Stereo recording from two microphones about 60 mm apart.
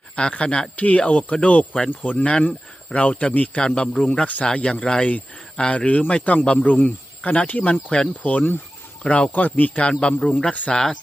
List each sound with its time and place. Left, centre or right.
0.2 s a man's voice: centre